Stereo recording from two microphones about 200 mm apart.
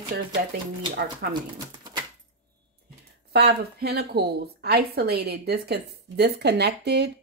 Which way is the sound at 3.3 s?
50° right (ahead or behind).